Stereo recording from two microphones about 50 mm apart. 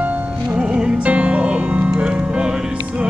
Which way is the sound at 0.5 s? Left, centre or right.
Centre.